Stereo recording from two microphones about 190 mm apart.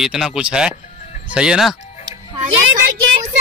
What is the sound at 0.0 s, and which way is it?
Speech, 5° right (ahead or behind).